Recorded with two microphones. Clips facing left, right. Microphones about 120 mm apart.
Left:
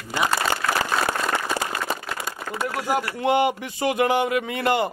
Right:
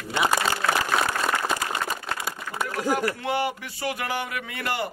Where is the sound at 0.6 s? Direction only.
Centre (ahead or behind).